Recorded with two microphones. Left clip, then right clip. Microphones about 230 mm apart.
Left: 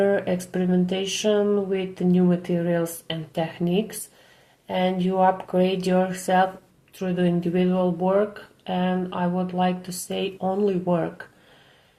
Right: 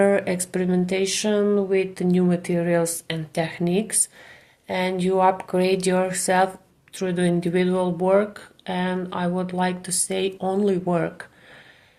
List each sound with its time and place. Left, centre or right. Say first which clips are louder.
0.0 s speech: right 2 dB; right